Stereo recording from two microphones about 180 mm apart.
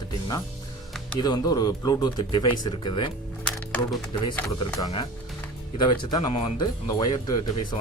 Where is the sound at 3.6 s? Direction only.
10° left (ahead or behind).